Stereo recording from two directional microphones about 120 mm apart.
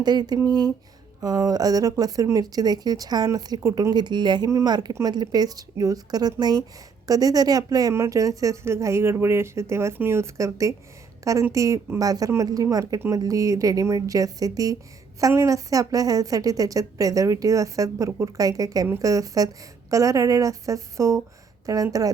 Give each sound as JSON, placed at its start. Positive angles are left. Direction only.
{"t": 0.0, "sound": "a woman's voice", "side_deg": -35}